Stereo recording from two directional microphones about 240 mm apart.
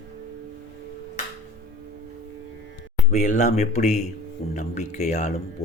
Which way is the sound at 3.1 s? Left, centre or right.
Left.